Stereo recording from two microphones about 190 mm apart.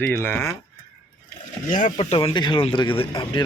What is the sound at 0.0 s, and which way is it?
Speech, 10° left (ahead or behind).